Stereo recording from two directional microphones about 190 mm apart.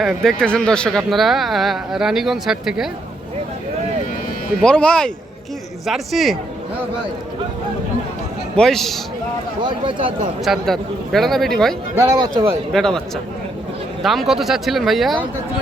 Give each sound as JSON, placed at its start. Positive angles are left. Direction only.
{"t": 0.0, "sound": "speech", "side_deg": 0}
{"t": 4.6, "sound": "speech", "side_deg": 5}
{"t": 8.5, "sound": "speech", "side_deg": 0}
{"t": 9.6, "sound": "speech", "side_deg": -25}
{"t": 10.4, "sound": "speech", "side_deg": 0}
{"t": 11.9, "sound": "speech", "side_deg": -15}
{"t": 12.7, "sound": "speech", "side_deg": 5}
{"t": 14.0, "sound": "speech", "side_deg": 0}